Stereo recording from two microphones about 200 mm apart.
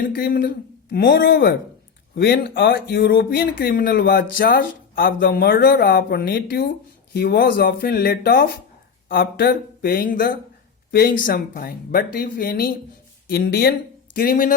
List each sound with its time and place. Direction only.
0.0 s speech: 45° left (ahead or behind)